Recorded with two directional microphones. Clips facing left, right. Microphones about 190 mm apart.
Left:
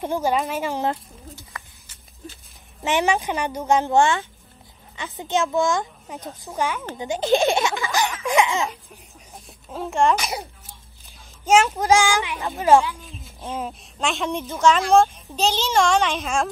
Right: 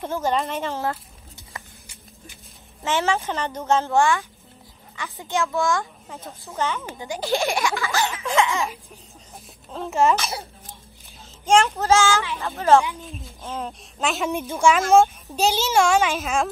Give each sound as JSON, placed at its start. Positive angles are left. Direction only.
{"t": 0.0, "sound": "speech", "side_deg": 10}
{"t": 1.5, "sound": "a sound", "side_deg": -25}
{"t": 2.8, "sound": "speech", "side_deg": 15}
{"t": 9.7, "sound": "a child's voice", "side_deg": 0}
{"t": 10.1, "sound": "speech", "side_deg": 15}
{"t": 11.4, "sound": "speech", "side_deg": 5}
{"t": 13.9, "sound": "a child's voice", "side_deg": -5}